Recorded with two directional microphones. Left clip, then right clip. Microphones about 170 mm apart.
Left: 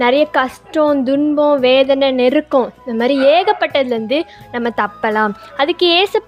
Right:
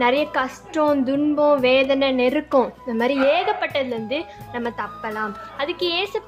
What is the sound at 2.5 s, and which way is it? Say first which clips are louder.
A woman's voice: left 4 dB; 25° left (ahead or behind).